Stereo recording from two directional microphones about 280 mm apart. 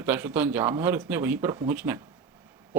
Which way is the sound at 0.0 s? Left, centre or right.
Centre.